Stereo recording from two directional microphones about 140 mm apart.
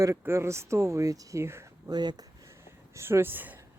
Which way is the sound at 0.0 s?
20° right (ahead or behind).